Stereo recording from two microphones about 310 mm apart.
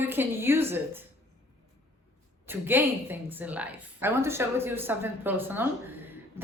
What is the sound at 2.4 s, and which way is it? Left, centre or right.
A woman's voice, centre.